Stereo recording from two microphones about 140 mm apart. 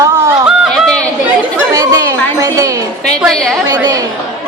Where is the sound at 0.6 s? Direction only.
5° left (ahead or behind).